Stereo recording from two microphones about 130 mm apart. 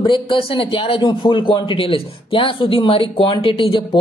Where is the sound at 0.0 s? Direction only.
40° left (ahead or behind).